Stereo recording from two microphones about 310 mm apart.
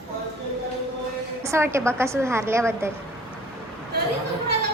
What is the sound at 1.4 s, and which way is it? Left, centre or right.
A woman's voice, centre.